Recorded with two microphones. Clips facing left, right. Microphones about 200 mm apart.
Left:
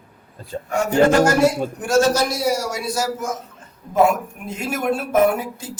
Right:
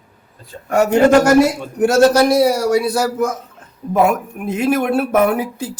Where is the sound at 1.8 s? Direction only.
60° right (ahead or behind).